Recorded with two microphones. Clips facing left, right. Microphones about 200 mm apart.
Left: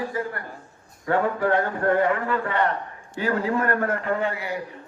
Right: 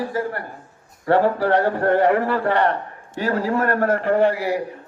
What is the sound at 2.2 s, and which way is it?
Speech, 70° right (ahead or behind).